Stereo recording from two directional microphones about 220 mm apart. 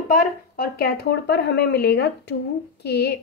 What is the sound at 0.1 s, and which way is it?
A woman's voice, 45° left (ahead or behind).